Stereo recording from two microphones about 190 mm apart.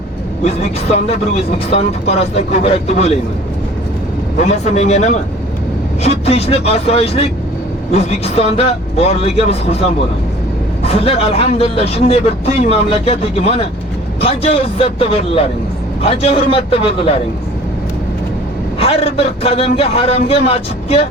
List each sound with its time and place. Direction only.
0.4 s a man's voice: 35° left (ahead or behind)
4.4 s a man's voice: 35° left (ahead or behind)
18.8 s a man's voice: 30° left (ahead or behind)